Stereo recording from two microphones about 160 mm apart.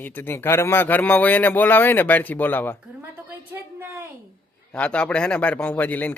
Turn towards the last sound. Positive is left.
turn(degrees=10)  # may be behind; listen again after turning